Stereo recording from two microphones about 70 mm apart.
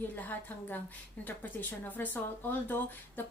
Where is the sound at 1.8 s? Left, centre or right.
Left.